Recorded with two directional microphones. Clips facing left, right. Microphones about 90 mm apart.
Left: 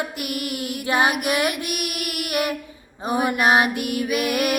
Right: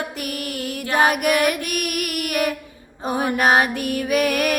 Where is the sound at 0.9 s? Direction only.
45° right (ahead or behind).